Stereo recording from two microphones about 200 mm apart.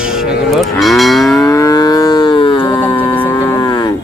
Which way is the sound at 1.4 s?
15° left (ahead or behind).